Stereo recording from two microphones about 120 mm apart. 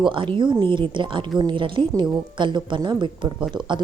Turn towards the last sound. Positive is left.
turn(degrees=-40)  # may be behind; listen again after turning